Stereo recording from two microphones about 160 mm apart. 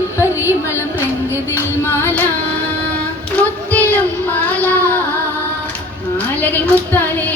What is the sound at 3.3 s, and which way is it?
Child singing, 10° left (ahead or behind).